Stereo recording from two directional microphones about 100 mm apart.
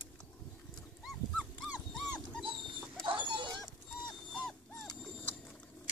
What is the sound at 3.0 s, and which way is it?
Dog, 55° right (ahead or behind).